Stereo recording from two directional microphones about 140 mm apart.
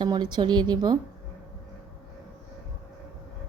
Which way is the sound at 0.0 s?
30° right (ahead or behind).